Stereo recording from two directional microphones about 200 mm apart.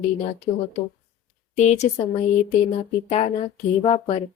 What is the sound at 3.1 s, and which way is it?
Speech, 35° left (ahead or behind).